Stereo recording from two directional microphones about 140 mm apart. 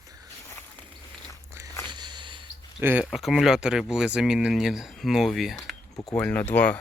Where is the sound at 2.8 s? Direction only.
10° right (ahead or behind).